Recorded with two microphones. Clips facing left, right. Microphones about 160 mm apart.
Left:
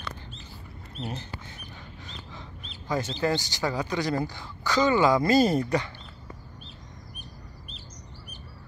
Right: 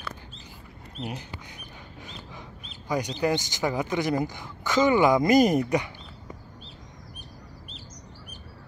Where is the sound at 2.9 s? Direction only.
15° right (ahead or behind).